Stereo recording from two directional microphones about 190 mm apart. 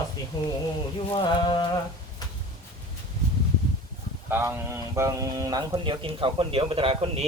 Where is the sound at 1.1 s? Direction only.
25° left (ahead or behind).